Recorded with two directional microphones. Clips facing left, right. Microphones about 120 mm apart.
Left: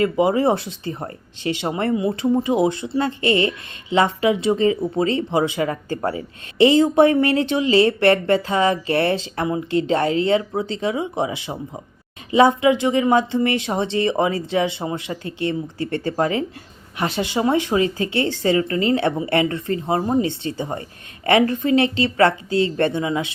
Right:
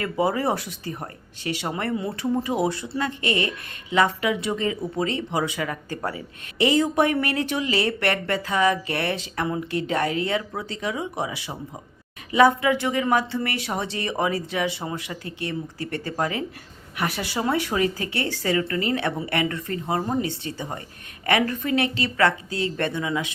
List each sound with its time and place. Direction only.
0.0 s speech: 20° left (ahead or behind)